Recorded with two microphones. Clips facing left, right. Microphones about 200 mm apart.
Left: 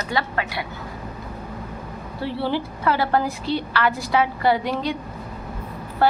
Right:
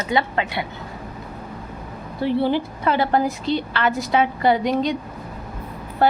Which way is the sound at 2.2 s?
15° right (ahead or behind).